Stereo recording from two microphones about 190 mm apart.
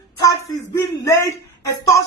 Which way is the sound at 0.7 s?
15° left (ahead or behind).